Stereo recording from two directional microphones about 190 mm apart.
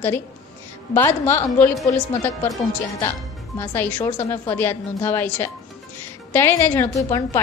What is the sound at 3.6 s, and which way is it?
A woman's voice, 10° left (ahead or behind).